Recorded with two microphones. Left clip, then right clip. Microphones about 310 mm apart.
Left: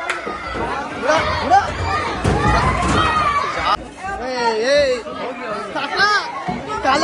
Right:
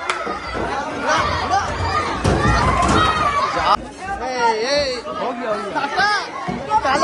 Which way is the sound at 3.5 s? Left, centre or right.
Centre.